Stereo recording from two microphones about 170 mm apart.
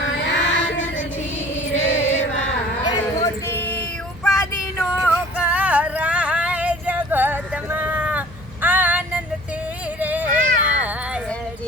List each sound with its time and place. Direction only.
0.3 s child singing: 90° left
1.8 s mantra: 90° left
2.8 s child singing: 20° left (ahead or behind)
4.9 s music: 5° right (ahead or behind)
8.6 s child singing: 10° right (ahead or behind)
10.0 s a sound: 10° right (ahead or behind)